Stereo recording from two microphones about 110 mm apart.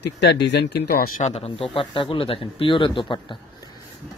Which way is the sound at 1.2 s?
65° left (ahead or behind).